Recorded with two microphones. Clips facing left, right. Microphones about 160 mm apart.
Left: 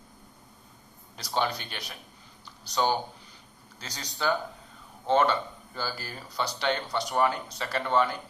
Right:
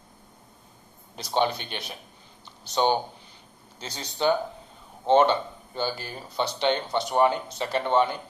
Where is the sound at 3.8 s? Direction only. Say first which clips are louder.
Right 4 dB; 25° right (ahead or behind).